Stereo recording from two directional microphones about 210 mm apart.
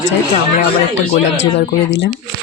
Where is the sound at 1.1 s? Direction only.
55° left (ahead or behind).